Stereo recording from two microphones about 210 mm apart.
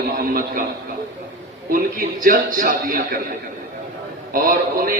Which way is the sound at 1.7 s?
40° right (ahead or behind).